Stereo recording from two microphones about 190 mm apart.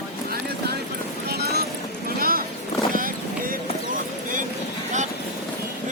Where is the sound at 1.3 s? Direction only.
55° right (ahead or behind).